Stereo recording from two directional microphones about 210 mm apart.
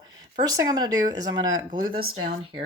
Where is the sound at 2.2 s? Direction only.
30° right (ahead or behind).